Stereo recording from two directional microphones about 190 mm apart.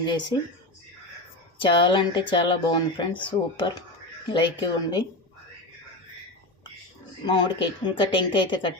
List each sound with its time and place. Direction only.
0.0 s speech: 20° left (ahead or behind)
1.5 s speech: 25° left (ahead or behind)
7.3 s speech: 20° left (ahead or behind)